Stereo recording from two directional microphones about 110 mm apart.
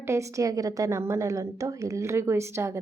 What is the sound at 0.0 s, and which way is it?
A woman's voice, 25° right (ahead or behind).